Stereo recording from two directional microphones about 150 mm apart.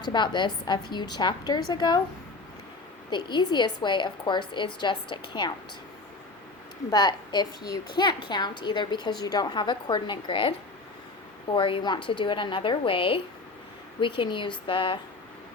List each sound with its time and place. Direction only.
0.0 s a woman's voice: 30° left (ahead or behind)
3.1 s a woman's voice: 30° left (ahead or behind)
6.9 s a woman's voice: 30° left (ahead or behind)
11.5 s a woman's voice: 35° left (ahead or behind)